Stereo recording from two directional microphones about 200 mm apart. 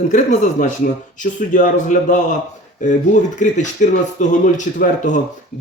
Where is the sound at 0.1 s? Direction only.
40° left (ahead or behind).